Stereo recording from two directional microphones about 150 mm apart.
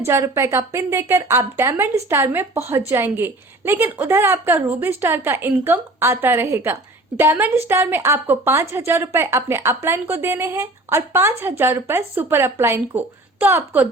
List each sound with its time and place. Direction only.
0.0 s a woman's voice: 15° right (ahead or behind)